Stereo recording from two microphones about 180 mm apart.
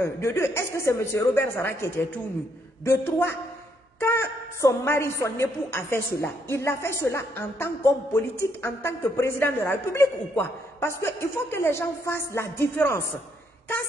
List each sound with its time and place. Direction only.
0.0 s a woman's voice: 15° left (ahead or behind)